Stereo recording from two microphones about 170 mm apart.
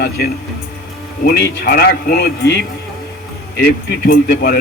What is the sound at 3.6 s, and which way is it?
Speech, 65° left (ahead or behind).